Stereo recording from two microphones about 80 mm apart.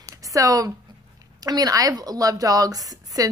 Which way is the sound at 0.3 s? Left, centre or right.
Right.